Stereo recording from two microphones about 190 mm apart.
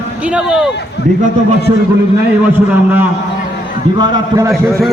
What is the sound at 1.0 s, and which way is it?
Speech, 60° left (ahead or behind).